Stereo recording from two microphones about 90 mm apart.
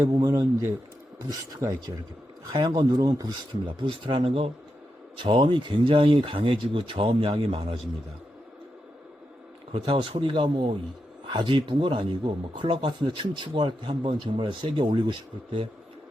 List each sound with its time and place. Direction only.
0.0 s speech: 40° right (ahead or behind)
3.7 s speech: 75° right (ahead or behind); by 4.5 s 90° right
5.1 s speech: 65° right (ahead or behind)
9.7 s speech: 80° right; by 15.1 s 60° right (ahead or behind)